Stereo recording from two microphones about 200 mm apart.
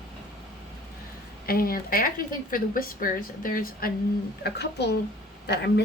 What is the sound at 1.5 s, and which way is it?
A woman's voice, 45° left (ahead or behind).